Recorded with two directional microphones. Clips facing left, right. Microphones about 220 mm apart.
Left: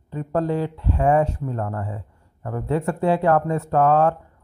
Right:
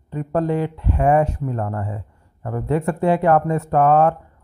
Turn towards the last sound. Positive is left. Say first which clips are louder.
# right 2 dB
turn(degrees=-15)  # may be behind; listen again after turning